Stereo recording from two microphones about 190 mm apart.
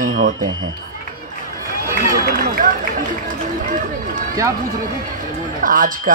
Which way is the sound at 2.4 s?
45° right (ahead or behind).